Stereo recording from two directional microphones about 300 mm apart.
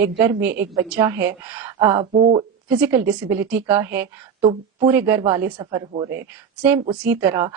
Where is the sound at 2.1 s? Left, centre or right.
Right.